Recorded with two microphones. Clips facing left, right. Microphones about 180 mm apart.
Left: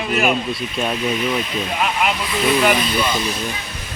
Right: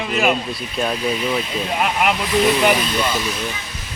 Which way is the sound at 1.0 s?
30° right (ahead or behind).